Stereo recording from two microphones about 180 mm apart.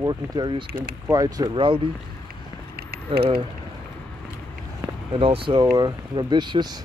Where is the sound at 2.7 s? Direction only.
55° right (ahead or behind).